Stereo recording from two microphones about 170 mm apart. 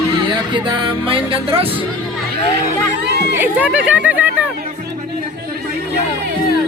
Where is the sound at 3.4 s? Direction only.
10° right (ahead or behind).